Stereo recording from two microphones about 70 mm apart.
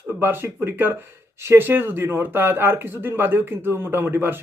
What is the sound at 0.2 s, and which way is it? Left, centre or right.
A man's voice, right.